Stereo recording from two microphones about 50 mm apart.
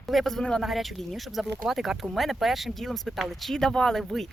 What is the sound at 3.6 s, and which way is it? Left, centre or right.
Speech, centre.